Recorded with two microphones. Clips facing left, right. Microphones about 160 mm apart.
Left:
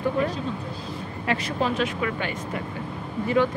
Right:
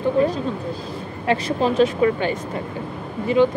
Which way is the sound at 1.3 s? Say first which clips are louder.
Right 6 dB; 35° right (ahead or behind).